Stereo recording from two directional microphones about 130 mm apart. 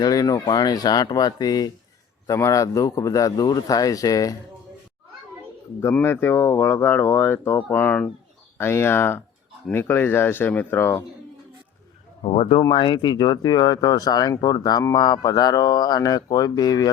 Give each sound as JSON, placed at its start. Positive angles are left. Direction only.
{"t": 0.0, "sound": "a man's voice", "side_deg": 30}
{"t": 6.0, "sound": "a man's voice", "side_deg": 20}
{"t": 12.2, "sound": "speech", "side_deg": 50}